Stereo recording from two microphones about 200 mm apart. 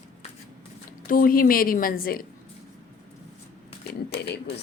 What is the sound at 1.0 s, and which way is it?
A woman's voice, 45° left (ahead or behind).